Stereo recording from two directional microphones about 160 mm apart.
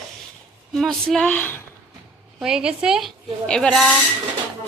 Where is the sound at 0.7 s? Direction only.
Centre (ahead or behind).